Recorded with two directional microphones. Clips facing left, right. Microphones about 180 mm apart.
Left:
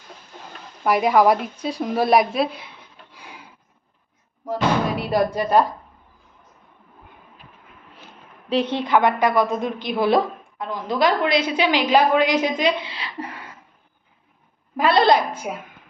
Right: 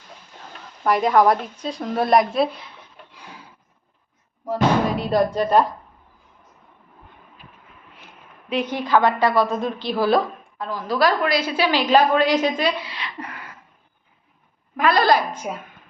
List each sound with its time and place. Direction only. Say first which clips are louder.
0.9 s a woman's voice: even; 5° left (ahead or behind)
4.9 s a woman's voice: right 1 dB; 5° left (ahead or behind)
8.4 s a woman's voice: left 2 dB; 30° left (ahead or behind)
14.8 s a woman's voice: left 1 dB; 30° left (ahead or behind)
15.4 s a woman's voice: even; 10° left (ahead or behind)